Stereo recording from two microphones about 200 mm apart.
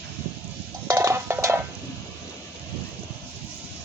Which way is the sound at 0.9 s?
15° right (ahead or behind).